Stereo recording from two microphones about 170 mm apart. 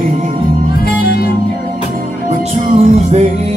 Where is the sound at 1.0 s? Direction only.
65° left (ahead or behind).